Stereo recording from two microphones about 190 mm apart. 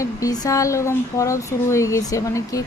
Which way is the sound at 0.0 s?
20° left (ahead or behind).